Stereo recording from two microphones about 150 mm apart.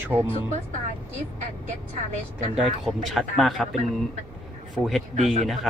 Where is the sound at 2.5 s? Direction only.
5° right (ahead or behind).